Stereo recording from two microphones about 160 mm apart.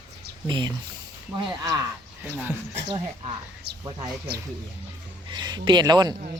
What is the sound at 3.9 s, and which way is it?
Speech, 25° right (ahead or behind).